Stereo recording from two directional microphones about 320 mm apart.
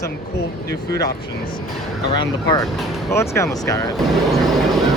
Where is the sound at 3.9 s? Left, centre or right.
Centre.